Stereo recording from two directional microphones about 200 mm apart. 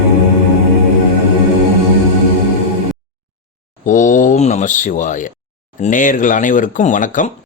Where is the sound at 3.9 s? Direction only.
40° left (ahead or behind).